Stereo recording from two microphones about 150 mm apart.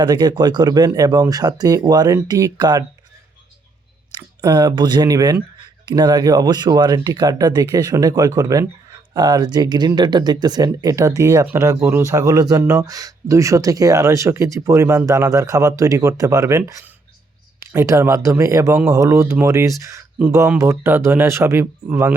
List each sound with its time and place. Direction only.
0.0 s speech: 30° right (ahead or behind)
4.4 s speech: 25° right (ahead or behind)